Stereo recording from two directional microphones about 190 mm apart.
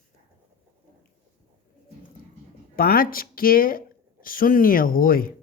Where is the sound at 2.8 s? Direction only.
50° left (ahead or behind).